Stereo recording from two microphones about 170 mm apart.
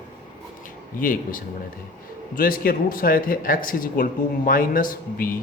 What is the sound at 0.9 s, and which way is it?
A man's voice, 55° left (ahead or behind).